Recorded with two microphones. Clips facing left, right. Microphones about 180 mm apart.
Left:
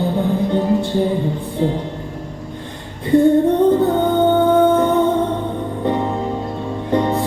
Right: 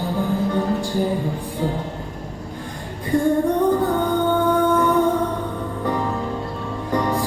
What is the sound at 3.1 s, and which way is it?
Female singing, 25° left (ahead or behind).